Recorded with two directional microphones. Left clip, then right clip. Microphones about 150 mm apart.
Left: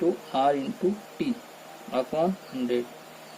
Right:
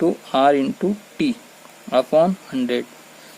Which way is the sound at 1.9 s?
50° right (ahead or behind).